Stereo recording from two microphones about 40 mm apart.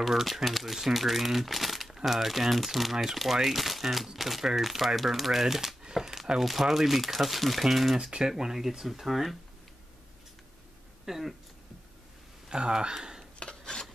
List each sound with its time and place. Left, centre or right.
0.0 s speech: centre
11.1 s speech: centre
12.4 s speech: right
13.4 s dishes: left